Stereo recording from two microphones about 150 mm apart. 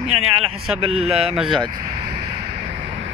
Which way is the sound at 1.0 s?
40° right (ahead or behind).